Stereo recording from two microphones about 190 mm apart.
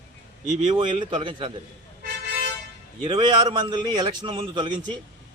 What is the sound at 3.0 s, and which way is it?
A man's voice, 25° right (ahead or behind).